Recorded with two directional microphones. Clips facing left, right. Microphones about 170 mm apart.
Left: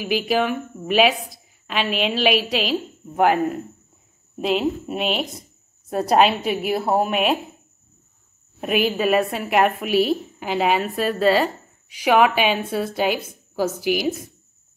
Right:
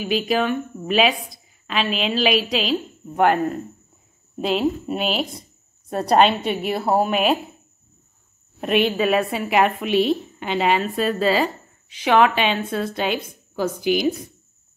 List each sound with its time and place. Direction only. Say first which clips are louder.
0.0 s a woman's voice: even; 5° left (ahead or behind)
8.5 s a woman's voice: right 2 dB; 5° left (ahead or behind)